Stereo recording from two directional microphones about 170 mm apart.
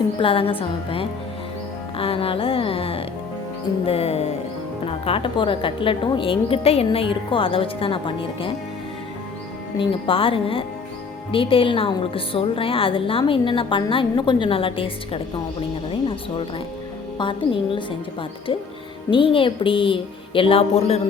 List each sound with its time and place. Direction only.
0.2 s a woman's voice: 35° left (ahead or behind)
9.7 s a woman's voice: 30° left (ahead or behind)
17.2 s a woman's voice: 30° left (ahead or behind)